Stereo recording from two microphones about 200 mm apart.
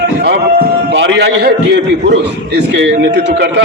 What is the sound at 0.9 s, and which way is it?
A man's voice, 65° right (ahead or behind).